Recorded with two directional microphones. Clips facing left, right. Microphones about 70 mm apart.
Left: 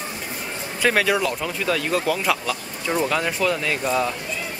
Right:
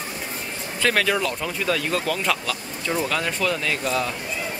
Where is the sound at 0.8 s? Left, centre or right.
Centre.